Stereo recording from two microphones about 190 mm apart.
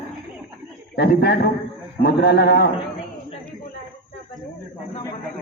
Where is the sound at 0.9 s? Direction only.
55° left (ahead or behind).